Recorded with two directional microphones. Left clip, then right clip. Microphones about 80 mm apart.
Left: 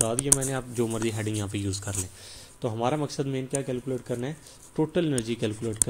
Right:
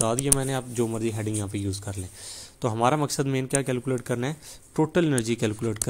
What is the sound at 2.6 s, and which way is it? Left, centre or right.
A man's voice, right.